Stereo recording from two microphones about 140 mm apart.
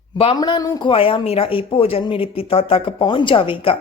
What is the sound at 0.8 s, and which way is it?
A woman's voice, 40° left (ahead or behind).